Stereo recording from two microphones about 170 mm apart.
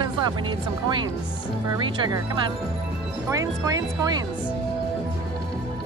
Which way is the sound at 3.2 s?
20° right (ahead or behind).